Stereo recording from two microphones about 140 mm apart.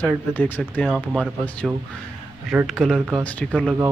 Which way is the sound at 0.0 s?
10° left (ahead or behind).